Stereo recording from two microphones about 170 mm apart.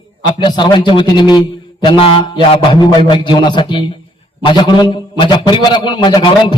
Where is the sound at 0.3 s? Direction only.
25° left (ahead or behind).